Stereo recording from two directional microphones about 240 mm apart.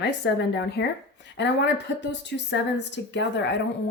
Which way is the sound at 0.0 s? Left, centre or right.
Left.